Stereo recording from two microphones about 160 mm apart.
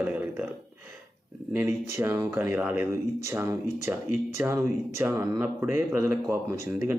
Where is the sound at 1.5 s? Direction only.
15° right (ahead or behind).